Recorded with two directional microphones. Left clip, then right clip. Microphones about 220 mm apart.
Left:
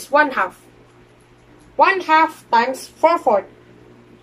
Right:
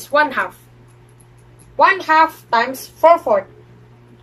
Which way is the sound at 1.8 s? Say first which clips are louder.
Right 1 dB; 5° left (ahead or behind).